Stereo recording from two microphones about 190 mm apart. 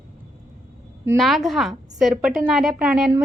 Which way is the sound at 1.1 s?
Centre (ahead or behind).